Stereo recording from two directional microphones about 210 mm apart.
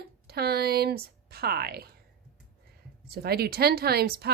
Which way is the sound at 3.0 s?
45° right (ahead or behind).